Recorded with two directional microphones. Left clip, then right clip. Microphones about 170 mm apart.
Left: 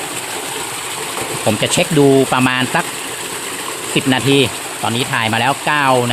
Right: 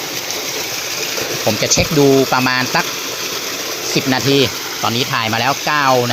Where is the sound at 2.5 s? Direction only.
25° left (ahead or behind).